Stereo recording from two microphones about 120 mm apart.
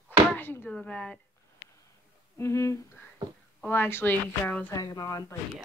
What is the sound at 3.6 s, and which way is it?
Speech, 20° left (ahead or behind).